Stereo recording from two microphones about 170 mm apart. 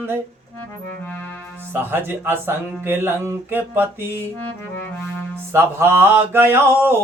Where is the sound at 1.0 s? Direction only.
10° left (ahead or behind).